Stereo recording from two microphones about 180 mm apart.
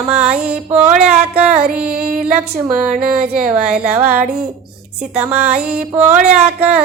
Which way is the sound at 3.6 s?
5° right (ahead or behind).